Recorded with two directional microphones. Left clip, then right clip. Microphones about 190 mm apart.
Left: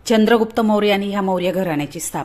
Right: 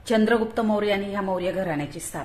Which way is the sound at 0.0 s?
35° left (ahead or behind).